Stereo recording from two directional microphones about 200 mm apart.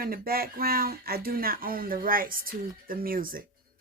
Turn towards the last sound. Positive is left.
turn(degrees=-45)  # may be behind; listen again after turning